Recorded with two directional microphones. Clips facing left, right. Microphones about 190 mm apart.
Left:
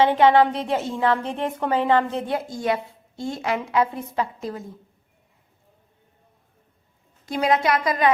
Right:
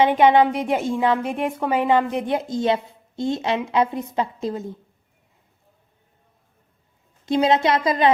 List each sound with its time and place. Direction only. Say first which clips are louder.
0.0 s a woman's voice: right 1 dB; 15° right (ahead or behind)
7.3 s a woman's voice: right 3 dB; 25° right (ahead or behind)